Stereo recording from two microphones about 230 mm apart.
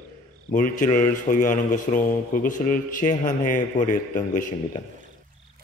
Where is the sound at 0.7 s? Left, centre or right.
Left.